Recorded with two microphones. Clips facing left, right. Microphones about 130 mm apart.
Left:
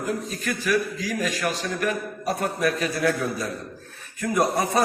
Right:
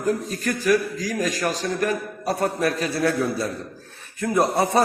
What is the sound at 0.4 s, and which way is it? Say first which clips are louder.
A man's voice: right 4 dB; 40° right (ahead or behind).